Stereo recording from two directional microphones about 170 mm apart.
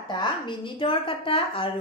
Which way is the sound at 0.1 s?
25° left (ahead or behind).